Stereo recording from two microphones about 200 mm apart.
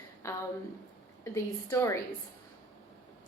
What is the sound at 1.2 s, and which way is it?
Speech, 15° left (ahead or behind).